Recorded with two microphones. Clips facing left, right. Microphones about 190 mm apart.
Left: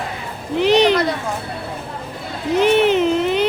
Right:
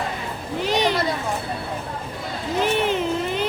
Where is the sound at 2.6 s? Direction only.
75° left (ahead or behind).